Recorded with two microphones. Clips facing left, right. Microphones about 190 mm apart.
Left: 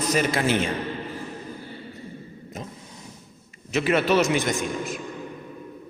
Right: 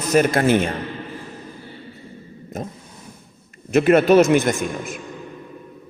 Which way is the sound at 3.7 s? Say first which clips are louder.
Right 8 dB; 50° right (ahead or behind).